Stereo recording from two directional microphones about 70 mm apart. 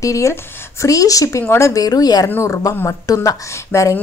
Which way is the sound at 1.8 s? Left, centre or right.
Left.